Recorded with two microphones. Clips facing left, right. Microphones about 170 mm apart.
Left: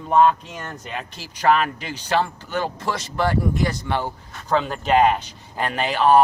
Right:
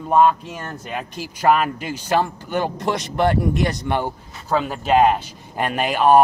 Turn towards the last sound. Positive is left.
turn(degrees=-15)  # may be behind; listen again after turning